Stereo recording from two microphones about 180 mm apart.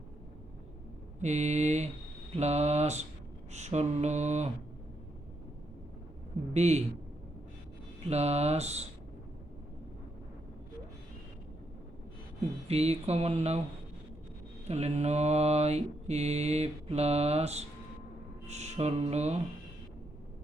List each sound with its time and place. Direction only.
1.2 s mantra: 40° right (ahead or behind)
6.5 s mantra: 40° right (ahead or behind)
8.0 s mantra: 35° right (ahead or behind)
12.6 s mantra: 35° right (ahead or behind)
14.7 s mantra: 35° right (ahead or behind)
18.4 s music: 40° right (ahead or behind)